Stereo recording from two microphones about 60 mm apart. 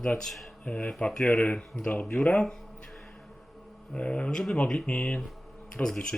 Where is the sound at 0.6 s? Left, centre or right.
Left.